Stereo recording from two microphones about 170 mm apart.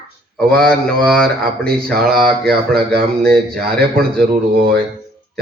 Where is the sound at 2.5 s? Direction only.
70° right (ahead or behind).